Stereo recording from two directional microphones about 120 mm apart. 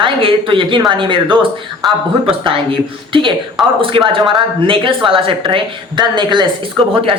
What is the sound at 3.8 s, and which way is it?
A woman's voice, 45° right (ahead or behind).